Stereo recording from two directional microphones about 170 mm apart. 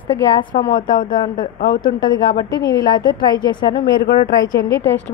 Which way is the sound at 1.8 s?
25° left (ahead or behind).